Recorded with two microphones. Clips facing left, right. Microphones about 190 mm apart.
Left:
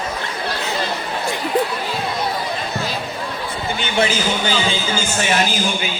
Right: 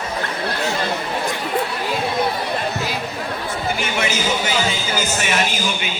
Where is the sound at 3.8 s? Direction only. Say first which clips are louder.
Left 3 dB; 30° left (ahead or behind).